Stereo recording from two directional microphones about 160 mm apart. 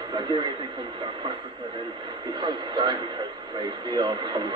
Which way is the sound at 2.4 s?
30° right (ahead or behind).